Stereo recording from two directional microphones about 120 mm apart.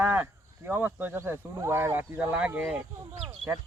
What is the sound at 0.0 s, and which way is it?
Speech, 20° right (ahead or behind).